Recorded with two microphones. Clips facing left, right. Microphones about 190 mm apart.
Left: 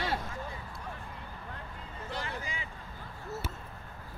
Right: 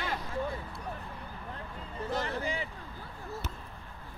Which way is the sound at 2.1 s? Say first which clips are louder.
Right 6 dB; 40° right (ahead or behind).